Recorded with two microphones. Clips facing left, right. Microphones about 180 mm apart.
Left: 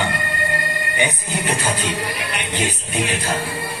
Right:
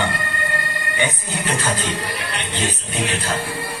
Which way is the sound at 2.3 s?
15° left (ahead or behind).